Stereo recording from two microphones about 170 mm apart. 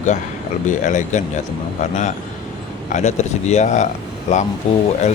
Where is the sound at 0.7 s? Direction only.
45° left (ahead or behind).